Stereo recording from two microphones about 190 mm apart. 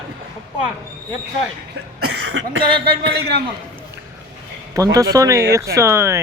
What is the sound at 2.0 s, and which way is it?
Speech, 70° right (ahead or behind).